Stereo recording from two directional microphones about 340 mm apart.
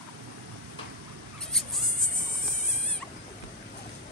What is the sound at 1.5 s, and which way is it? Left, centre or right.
Insect, centre.